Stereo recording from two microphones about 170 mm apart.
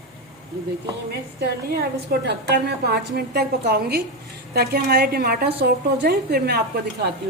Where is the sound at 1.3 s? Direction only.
70° right (ahead or behind).